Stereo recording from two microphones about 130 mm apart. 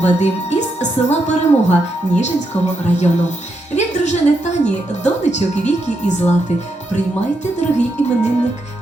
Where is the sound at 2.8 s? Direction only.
60° left (ahead or behind).